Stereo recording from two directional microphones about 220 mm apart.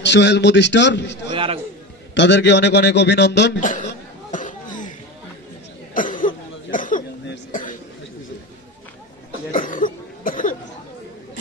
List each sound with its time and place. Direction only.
0.0 s a man's voice: 50° left (ahead or behind)
1.3 s speech: 25° right (ahead or behind)
2.1 s a man's voice: 50° left (ahead or behind)
4.3 s cough: 35° left (ahead or behind)
6.1 s cough: 35° left (ahead or behind)
9.5 s cough: 35° left (ahead or behind)